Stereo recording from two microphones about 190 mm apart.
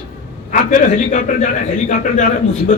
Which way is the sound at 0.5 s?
40° left (ahead or behind).